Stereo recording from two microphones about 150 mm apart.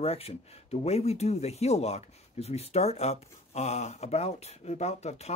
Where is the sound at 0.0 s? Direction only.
45° left (ahead or behind).